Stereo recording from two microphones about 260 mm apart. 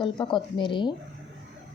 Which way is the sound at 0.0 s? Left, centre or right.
Centre.